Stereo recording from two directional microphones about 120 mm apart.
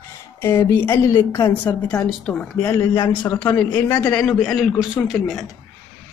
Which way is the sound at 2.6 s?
25° left (ahead or behind).